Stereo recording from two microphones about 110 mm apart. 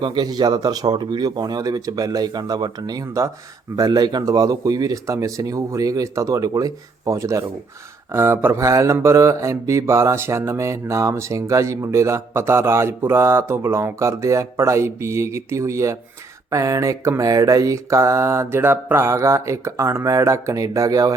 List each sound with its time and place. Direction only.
0.0 s speech: 40° right (ahead or behind)